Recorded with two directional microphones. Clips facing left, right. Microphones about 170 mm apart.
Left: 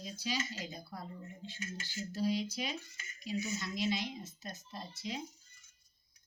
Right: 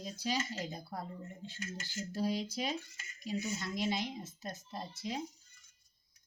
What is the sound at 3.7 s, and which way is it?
Speech, 50° right (ahead or behind).